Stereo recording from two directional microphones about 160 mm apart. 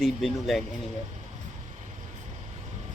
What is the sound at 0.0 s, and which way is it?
Speech, centre (ahead or behind).